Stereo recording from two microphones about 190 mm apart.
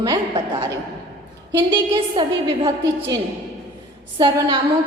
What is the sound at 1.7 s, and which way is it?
A woman's voice, 25° right (ahead or behind).